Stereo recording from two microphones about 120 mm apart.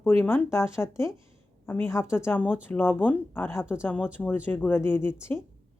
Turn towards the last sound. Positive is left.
turn(degrees=20)  # may be behind; listen again after turning